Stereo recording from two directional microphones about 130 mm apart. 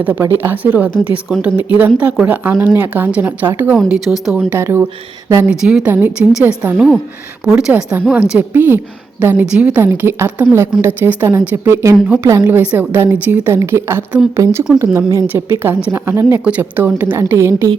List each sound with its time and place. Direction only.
0.0 s a woman's voice: 10° right (ahead or behind)
3.8 s a woman's voice: 5° right (ahead or behind)
4.5 s a woman's voice: 20° right (ahead or behind)
5.5 s a woman's voice: 10° right (ahead or behind)